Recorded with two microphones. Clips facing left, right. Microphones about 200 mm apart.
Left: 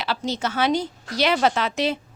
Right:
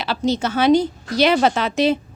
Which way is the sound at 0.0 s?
25° right (ahead or behind).